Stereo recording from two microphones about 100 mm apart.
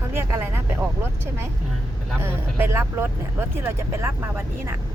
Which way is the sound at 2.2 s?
25° right (ahead or behind).